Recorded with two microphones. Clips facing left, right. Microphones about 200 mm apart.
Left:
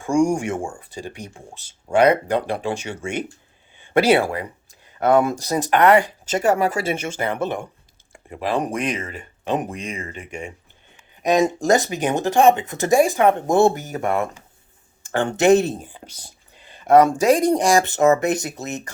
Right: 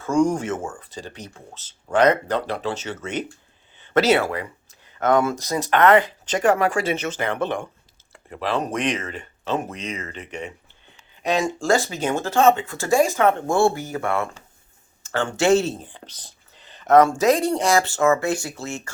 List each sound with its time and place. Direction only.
0.0 s speech: 10° left (ahead or behind)
3.8 s a sound: 10° left (ahead or behind)
5.3 s speech: 35° left (ahead or behind)
5.5 s speech: 15° left (ahead or behind)